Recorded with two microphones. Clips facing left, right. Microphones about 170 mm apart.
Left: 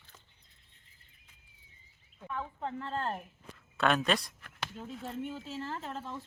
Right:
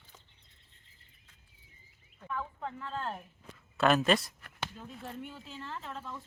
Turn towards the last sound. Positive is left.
turn(degrees=30)  # may be behind; listen again after turning